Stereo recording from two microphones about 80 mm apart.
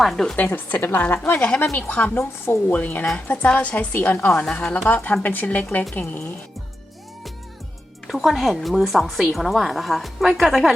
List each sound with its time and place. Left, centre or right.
0.0 s a woman's voice: centre
0.4 s a woman's voice: left
1.2 s a woman's voice: centre
4.4 s a woman's voice: centre
8.0 s a woman's voice: centre